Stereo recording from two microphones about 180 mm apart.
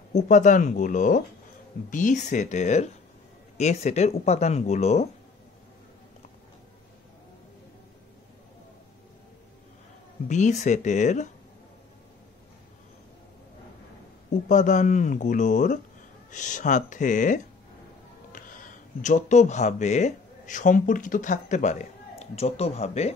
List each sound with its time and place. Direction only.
0.1 s speech: 40° left (ahead or behind)
10.2 s speech: 40° left (ahead or behind)
14.5 s speech: 45° left (ahead or behind)